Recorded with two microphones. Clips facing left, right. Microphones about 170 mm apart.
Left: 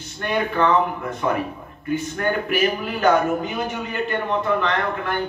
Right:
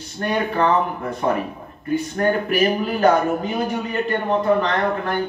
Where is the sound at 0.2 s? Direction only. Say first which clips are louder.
Right 1 dB; 35° right (ahead or behind).